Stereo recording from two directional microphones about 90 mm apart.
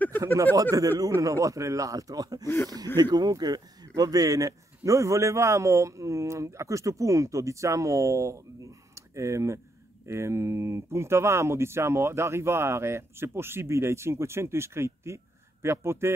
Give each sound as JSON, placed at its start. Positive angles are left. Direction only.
{"t": 0.6, "sound": "speech", "side_deg": -40}
{"t": 2.4, "sound": "speech", "side_deg": 25}
{"t": 3.0, "sound": "speech", "side_deg": -50}